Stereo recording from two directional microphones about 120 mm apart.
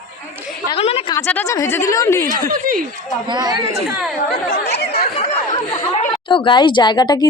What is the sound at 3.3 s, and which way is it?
Speech, 35° right (ahead or behind).